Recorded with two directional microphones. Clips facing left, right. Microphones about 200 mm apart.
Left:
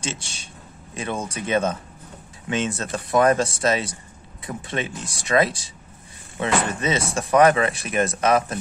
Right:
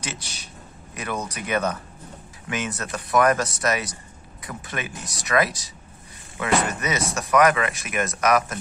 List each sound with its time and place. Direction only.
0.0 s speech: 25° left (ahead or behind)